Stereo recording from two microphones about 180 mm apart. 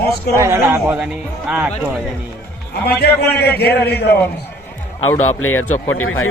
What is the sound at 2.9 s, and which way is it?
A man's voice, 65° left (ahead or behind).